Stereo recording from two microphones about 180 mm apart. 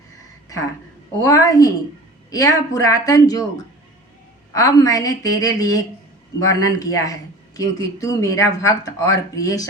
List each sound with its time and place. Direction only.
1.2 s speech: 20° left (ahead or behind)
4.5 s speech: 20° left (ahead or behind)